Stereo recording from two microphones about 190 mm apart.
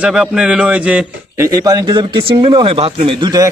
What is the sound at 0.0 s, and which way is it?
A man's voice, 5° right (ahead or behind).